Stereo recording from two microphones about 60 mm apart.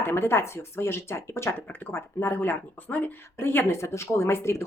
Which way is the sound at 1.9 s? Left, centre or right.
Left.